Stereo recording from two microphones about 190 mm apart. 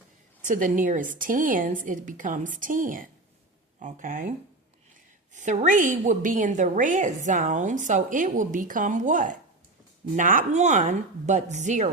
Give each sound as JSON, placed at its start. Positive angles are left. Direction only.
{"t": 0.4, "sound": "a woman's voice", "side_deg": -45}
{"t": 5.4, "sound": "a woman's voice", "side_deg": -40}